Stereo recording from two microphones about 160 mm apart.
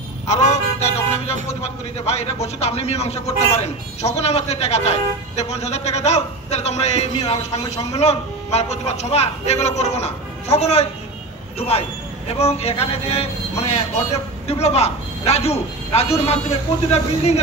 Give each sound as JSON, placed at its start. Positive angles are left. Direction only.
{"t": 0.3, "sound": "a man's voice", "side_deg": 45}